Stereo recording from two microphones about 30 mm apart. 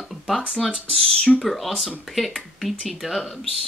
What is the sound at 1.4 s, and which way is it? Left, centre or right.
Speech, centre.